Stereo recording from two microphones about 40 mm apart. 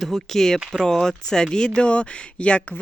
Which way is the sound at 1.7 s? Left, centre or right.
Left.